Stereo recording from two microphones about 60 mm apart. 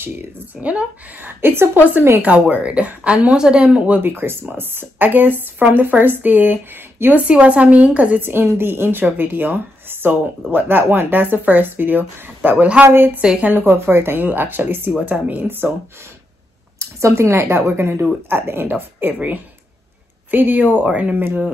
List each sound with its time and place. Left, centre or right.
0.0 s speech: right
0.7 s speech: right
1.2 s speech: right
2.2 s speech: right
4.0 s speech: right
7.2 s speech: centre
8.2 s speech: right
12.4 s speech: right
12.8 s speech: right
13.2 s speech: centre
13.5 s speech: right
16.7 s speech: right
19.1 s speech: right